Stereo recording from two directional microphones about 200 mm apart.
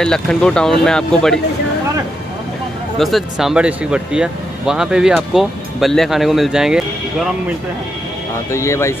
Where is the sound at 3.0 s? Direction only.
Centre (ahead or behind).